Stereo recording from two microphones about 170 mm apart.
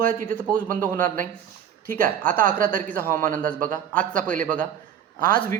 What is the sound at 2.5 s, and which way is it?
Speech, 50° right (ahead or behind).